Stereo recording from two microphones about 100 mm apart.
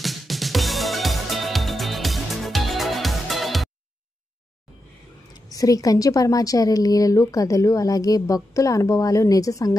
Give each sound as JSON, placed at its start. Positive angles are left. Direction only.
{"t": 0.0, "sound": "music", "side_deg": 0}
{"t": 5.3, "sound": "a woman's voice", "side_deg": 35}